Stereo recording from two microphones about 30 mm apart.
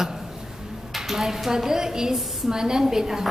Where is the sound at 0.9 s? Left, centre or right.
Centre.